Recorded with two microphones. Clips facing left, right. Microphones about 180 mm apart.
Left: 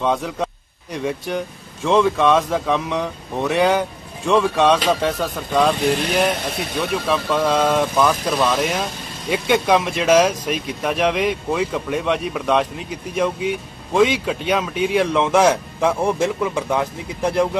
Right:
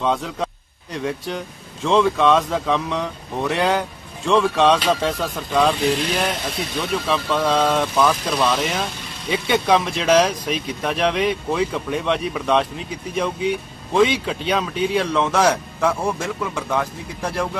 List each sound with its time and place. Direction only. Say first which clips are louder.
0.0 s speech: left 1 dB; 10° left (ahead or behind)
5.8 s speech: left 1 dB; 55° left (ahead or behind)
7.1 s speech: left 1 dB; 15° left (ahead or behind)
7.9 s speech: left 1 dB; centre (ahead or behind); by 17.5 s 15° left (ahead or behind)